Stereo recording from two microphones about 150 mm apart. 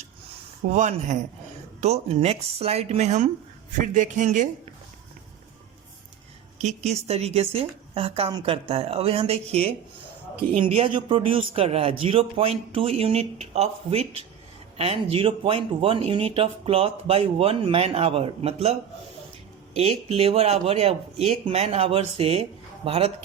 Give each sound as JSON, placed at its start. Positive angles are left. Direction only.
{"t": 0.7, "sound": "a man's voice", "side_deg": -55}
{"t": 6.6, "sound": "speech", "side_deg": -50}